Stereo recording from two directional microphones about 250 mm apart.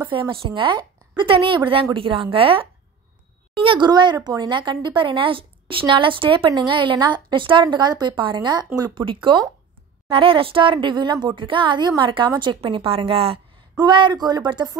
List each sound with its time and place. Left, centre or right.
0.0 s speech: centre